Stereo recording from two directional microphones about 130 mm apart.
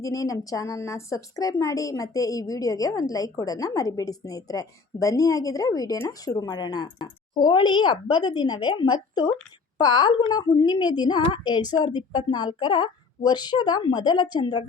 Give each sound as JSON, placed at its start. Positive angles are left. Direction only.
{"t": 0.0, "sound": "a woman's voice", "side_deg": 25}